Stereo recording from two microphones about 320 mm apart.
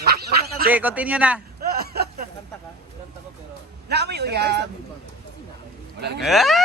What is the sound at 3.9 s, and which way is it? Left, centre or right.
Speech, right.